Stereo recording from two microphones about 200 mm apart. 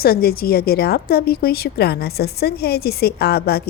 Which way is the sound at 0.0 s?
50° left (ahead or behind).